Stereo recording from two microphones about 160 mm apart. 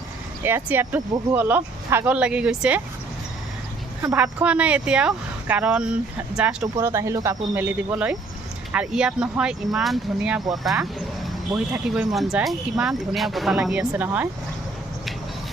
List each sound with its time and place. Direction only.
0.4 s speech: 15° right (ahead or behind)
4.0 s speech: 10° right (ahead or behind)
6.7 s speech: 20° right (ahead or behind)
7.5 s speech: 10° right (ahead or behind)
12.1 s speech: centre (ahead or behind)